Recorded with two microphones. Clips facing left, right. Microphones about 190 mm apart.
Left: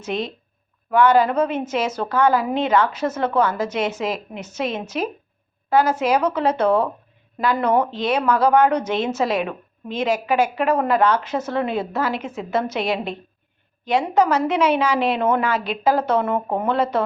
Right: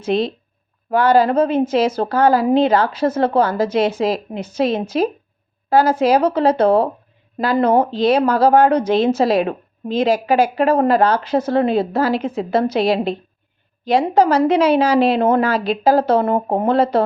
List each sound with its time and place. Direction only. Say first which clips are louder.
0.0 s speech: right 7 dB; 30° right (ahead or behind)